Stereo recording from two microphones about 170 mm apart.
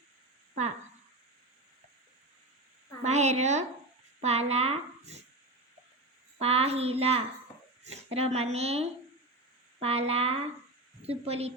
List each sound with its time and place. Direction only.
3.0 s a woman's voice: 40° right (ahead or behind)
6.4 s speech: 35° right (ahead or behind)